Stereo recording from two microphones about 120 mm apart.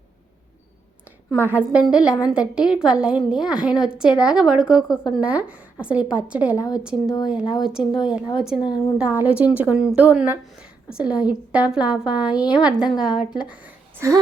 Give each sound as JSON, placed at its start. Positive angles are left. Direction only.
{"t": 1.5, "sound": "a woman's voice", "side_deg": -10}
{"t": 6.6, "sound": "a woman's voice", "side_deg": 30}
{"t": 6.8, "sound": "a woman's voice", "side_deg": -5}
{"t": 8.5, "sound": "a woman's voice", "side_deg": 40}
{"t": 9.0, "sound": "a woman's voice", "side_deg": -10}